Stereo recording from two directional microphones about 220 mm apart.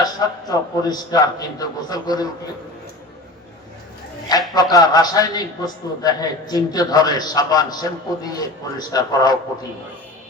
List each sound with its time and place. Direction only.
0.0 s a man's voice: 15° left (ahead or behind)
4.5 s a man's voice: 15° left (ahead or behind)